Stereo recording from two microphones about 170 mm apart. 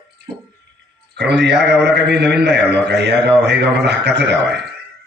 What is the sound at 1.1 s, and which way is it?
A man's voice, 90° right.